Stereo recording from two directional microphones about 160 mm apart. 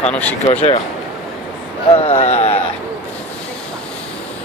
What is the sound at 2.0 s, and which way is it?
Speech, 40° left (ahead or behind).